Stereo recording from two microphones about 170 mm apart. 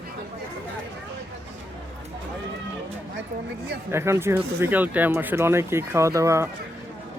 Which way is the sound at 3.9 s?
15° right (ahead or behind).